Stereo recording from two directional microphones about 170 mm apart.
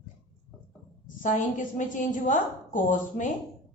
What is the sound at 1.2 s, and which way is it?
A woman's voice, 50° left (ahead or behind).